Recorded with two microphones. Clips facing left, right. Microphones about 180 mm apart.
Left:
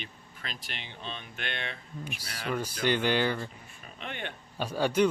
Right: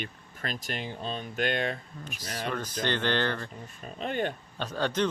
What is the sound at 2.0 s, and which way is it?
Speech, 10° left (ahead or behind).